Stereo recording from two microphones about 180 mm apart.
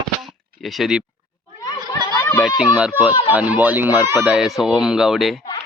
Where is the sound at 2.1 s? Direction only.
15° left (ahead or behind).